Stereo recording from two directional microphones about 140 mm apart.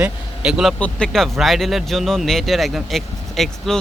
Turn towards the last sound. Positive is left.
turn(degrees=0)  # may be behind; listen again after turning